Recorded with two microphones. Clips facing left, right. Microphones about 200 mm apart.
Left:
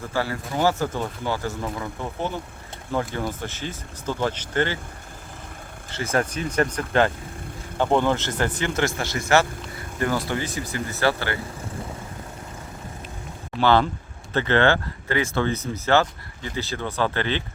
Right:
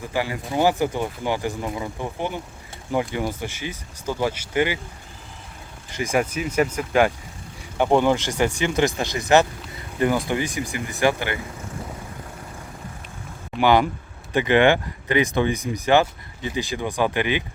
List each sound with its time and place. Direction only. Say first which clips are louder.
0.1 s speech: right 1 dB; 15° right (ahead or behind)
5.9 s speech: right 2 dB; 15° right (ahead or behind)
9.7 s boat: right 4 dB; 15° right (ahead or behind)
10.2 s speech: right 3 dB; 15° right (ahead or behind)
13.6 s speech: right 1 dB; 15° right (ahead or behind)